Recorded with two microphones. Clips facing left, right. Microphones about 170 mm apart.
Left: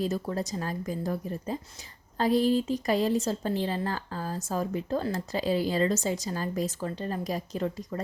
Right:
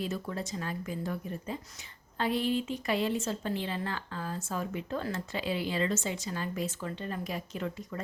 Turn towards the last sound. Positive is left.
turn(degrees=35)  # may be behind; listen again after turning